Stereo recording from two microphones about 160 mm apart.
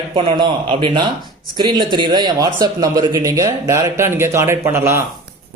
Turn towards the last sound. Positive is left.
turn(degrees=-15)  # may be behind; listen again after turning